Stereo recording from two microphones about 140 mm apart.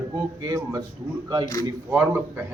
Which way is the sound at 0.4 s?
25° right (ahead or behind).